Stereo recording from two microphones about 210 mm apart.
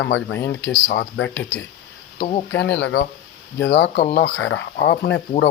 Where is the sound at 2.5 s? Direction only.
55° left (ahead or behind).